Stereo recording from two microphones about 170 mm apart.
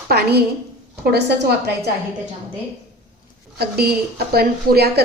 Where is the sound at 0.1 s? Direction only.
70° right (ahead or behind).